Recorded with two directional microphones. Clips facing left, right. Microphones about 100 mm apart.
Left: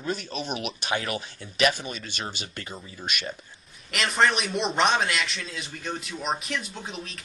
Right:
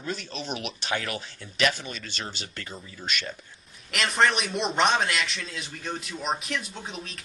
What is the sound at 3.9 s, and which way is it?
A man's voice, centre (ahead or behind).